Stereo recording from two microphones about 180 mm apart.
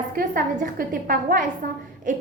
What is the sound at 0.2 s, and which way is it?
A woman's voice, 55° right (ahead or behind).